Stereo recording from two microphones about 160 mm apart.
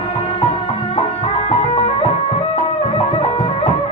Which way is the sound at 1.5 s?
40° left (ahead or behind).